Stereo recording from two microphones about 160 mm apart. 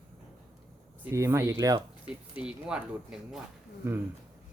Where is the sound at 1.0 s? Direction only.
15° right (ahead or behind).